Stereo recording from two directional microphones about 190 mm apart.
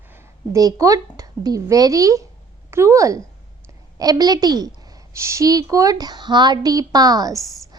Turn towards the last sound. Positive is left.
turn(degrees=-20)  # may be behind; listen again after turning